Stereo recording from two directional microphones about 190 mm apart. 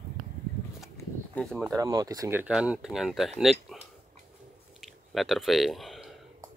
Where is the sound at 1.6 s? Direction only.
15° right (ahead or behind); by 3.8 s centre (ahead or behind).